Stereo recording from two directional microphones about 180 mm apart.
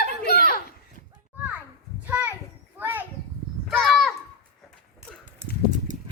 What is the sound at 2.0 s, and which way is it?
Children playing, 10° right (ahead or behind).